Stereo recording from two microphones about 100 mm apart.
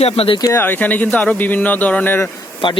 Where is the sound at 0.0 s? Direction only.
75° left (ahead or behind).